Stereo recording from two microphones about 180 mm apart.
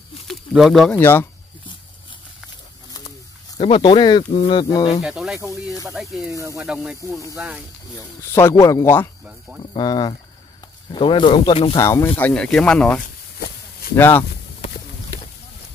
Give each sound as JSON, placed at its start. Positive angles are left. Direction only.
{"t": 0.3, "sound": "a sound", "side_deg": 0}
{"t": 0.9, "sound": "speech", "side_deg": 10}
{"t": 3.5, "sound": "speech", "side_deg": 30}
{"t": 5.0, "sound": "speech", "side_deg": -5}
{"t": 8.4, "sound": "speech", "side_deg": 15}
{"t": 9.6, "sound": "speech", "side_deg": 25}
{"t": 11.8, "sound": "speech", "side_deg": 15}